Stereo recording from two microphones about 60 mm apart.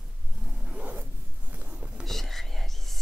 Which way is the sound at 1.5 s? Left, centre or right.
Right.